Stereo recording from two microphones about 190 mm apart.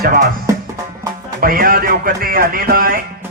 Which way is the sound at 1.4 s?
50° right (ahead or behind).